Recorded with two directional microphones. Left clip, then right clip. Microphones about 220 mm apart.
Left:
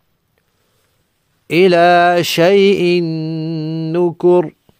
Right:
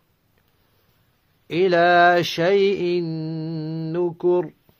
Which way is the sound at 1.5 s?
40° left (ahead or behind).